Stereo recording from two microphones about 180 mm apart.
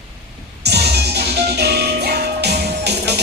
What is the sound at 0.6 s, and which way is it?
Music, 65° right (ahead or behind).